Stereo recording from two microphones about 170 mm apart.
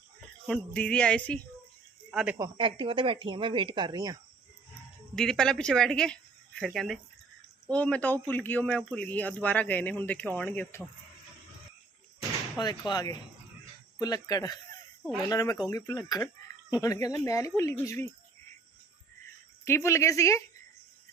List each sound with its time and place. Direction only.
0.4 s speech: 5° left (ahead or behind)
2.0 s speech: 5° right (ahead or behind)
2.4 s speech: 30° right (ahead or behind)
5.1 s speech: 5° left (ahead or behind)
12.9 s speech: 20° left (ahead or behind)
19.6 s speech: 15° left (ahead or behind)